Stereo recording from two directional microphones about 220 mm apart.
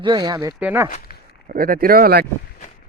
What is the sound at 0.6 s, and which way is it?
Speech, 5° right (ahead or behind).